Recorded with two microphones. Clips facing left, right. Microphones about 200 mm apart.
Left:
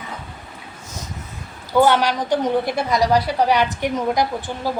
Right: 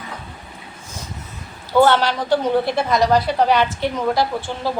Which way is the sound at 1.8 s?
15° left (ahead or behind).